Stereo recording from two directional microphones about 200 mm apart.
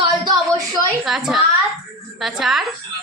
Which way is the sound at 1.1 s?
Centre (ahead or behind).